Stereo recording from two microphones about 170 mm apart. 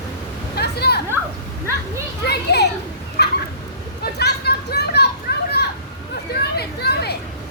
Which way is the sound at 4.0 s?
70° left (ahead or behind).